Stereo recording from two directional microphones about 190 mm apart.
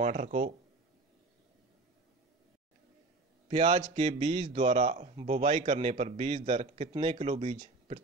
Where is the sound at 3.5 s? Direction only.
30° right (ahead or behind).